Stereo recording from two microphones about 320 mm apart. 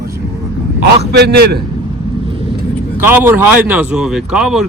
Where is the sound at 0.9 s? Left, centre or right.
Right.